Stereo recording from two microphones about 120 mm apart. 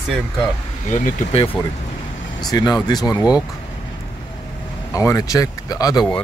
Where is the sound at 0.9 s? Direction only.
90° left.